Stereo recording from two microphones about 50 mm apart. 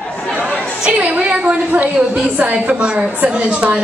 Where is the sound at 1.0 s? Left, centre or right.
Right.